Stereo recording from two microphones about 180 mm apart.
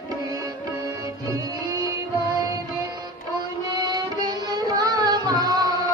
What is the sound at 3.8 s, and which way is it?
Carnatic music, 20° right (ahead or behind).